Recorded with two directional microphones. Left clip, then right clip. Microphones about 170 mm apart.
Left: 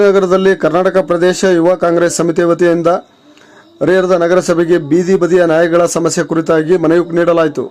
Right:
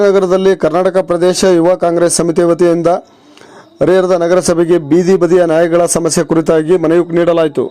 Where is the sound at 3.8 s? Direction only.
25° right (ahead or behind).